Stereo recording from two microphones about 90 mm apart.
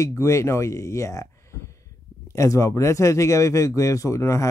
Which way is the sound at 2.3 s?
35° left (ahead or behind).